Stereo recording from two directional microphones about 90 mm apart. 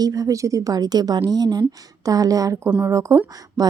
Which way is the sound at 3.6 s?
45° right (ahead or behind).